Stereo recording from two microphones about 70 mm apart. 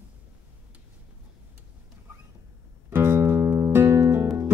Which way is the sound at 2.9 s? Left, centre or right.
Right.